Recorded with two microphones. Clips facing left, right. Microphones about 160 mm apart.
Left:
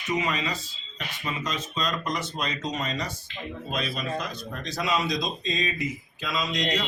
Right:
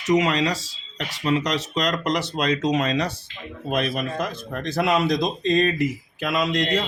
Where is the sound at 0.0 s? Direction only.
80° right.